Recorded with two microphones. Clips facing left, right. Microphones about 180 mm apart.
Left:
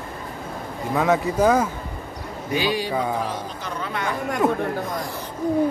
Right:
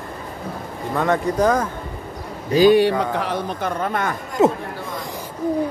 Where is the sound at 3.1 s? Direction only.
70° right (ahead or behind); by 4.1 s 50° right (ahead or behind).